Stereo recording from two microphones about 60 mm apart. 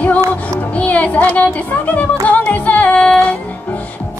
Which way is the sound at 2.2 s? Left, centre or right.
Left.